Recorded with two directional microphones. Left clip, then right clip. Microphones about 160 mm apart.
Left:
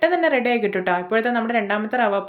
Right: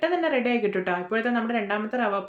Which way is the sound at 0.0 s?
25° left (ahead or behind).